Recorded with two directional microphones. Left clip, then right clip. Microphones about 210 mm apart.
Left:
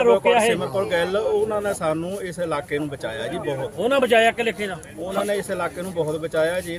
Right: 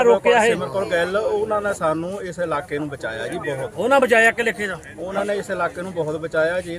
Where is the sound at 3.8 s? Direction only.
15° right (ahead or behind).